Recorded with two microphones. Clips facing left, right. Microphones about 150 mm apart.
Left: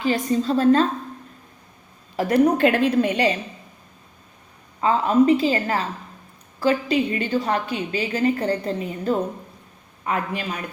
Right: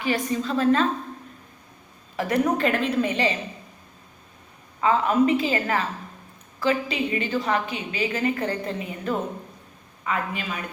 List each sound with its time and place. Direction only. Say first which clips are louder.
0.1 s a woman's voice: left 3 dB; 35° left (ahead or behind)
2.1 s a woman's voice: left 5 dB; 40° left (ahead or behind)
4.8 s a woman's voice: left 2 dB; 35° left (ahead or behind)